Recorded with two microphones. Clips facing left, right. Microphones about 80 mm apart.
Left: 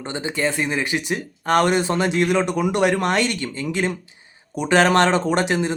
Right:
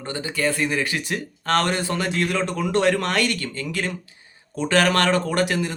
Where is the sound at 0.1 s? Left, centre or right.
Left.